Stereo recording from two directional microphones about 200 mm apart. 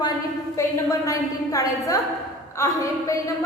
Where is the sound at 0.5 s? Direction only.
15° left (ahead or behind).